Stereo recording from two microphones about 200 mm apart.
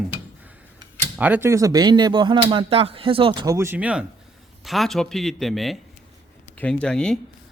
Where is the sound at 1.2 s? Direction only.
10° right (ahead or behind).